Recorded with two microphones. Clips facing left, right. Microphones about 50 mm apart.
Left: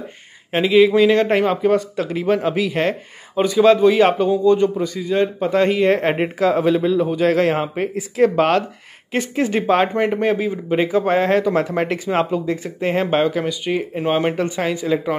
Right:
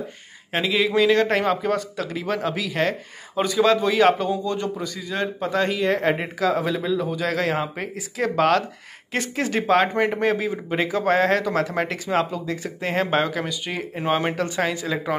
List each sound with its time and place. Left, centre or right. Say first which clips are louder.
0.5 s a man's voice: left 8 dB; centre
3.3 s a man's voice: left 6 dB; centre